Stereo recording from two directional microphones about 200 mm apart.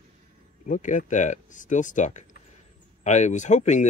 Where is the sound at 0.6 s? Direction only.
40° left (ahead or behind).